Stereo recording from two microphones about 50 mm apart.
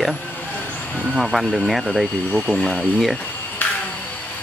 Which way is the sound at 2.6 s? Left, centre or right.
Centre.